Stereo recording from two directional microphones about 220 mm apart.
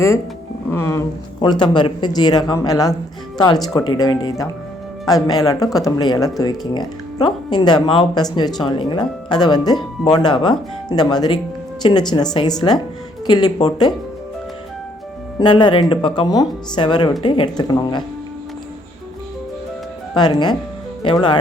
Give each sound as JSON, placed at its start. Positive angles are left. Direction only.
{"t": 0.7, "sound": "speech", "side_deg": 10}
{"t": 15.4, "sound": "speech", "side_deg": 20}
{"t": 20.1, "sound": "speech", "side_deg": 20}